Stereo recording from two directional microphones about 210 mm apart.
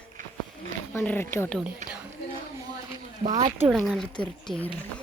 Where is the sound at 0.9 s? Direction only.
10° left (ahead or behind).